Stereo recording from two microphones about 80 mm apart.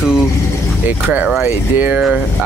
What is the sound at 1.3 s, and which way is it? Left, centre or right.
Speech, right.